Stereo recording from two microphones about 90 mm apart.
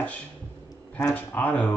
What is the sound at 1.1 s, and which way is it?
Speech, 20° left (ahead or behind).